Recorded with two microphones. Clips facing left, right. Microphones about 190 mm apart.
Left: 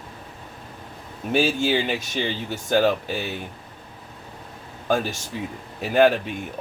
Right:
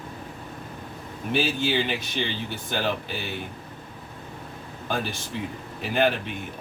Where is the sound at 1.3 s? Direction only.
45° left (ahead or behind).